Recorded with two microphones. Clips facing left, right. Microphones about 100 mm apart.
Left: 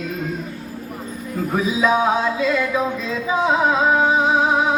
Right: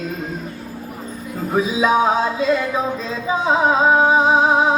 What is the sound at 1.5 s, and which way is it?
Music, 30° right (ahead or behind).